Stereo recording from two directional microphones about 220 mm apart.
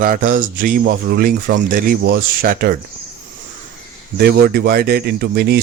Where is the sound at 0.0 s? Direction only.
40° right (ahead or behind).